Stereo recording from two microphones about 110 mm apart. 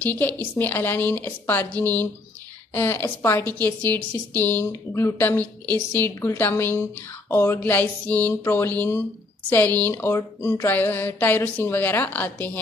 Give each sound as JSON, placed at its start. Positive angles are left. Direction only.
{"t": 0.0, "sound": "a woman's voice", "side_deg": 15}